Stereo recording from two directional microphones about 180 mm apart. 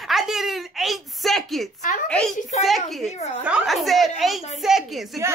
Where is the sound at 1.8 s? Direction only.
45° left (ahead or behind).